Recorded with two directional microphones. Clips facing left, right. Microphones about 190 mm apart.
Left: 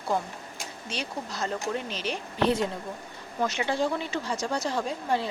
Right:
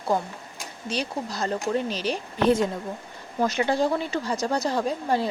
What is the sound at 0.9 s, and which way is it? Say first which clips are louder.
Speech: right 6 dB; 35° right (ahead or behind).